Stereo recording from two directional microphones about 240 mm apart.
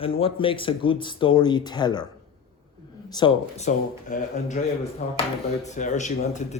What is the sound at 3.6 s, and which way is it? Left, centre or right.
Speech, left.